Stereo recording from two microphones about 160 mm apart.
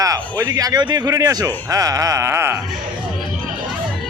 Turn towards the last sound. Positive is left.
turn(degrees=-15)  # may be behind; listen again after turning